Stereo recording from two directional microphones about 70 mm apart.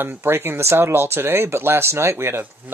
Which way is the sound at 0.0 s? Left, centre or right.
Right.